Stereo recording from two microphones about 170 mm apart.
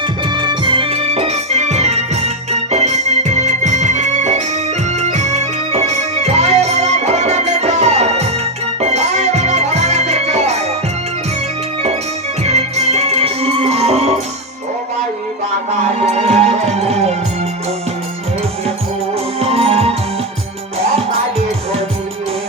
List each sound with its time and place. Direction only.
0.3 s music: 25° right (ahead or behind)
12.4 s music: 40° right (ahead or behind)
16.1 s music: 40° right (ahead or behind)
19.4 s music: 35° right (ahead or behind)